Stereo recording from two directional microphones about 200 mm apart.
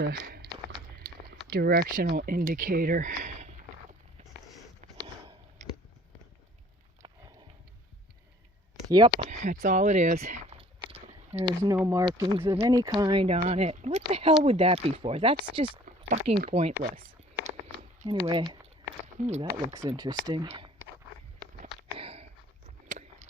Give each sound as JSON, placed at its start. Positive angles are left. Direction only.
{"t": 0.0, "sound": "speech", "side_deg": -50}
{"t": 1.5, "sound": "speech", "side_deg": -50}
{"t": 7.0, "sound": "a sound", "side_deg": -25}
{"t": 8.8, "sound": "speech", "side_deg": -20}
{"t": 9.4, "sound": "a sound", "side_deg": -40}
{"t": 11.6, "sound": "speech", "side_deg": -15}
{"t": 16.1, "sound": "speech", "side_deg": -35}
{"t": 18.0, "sound": "speech", "side_deg": -25}
{"t": 19.2, "sound": "speech", "side_deg": -35}
{"t": 20.0, "sound": "speech", "side_deg": -20}
{"t": 21.9, "sound": "sniff", "side_deg": -30}